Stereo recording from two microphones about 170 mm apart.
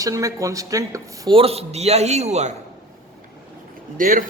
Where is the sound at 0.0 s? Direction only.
20° right (ahead or behind).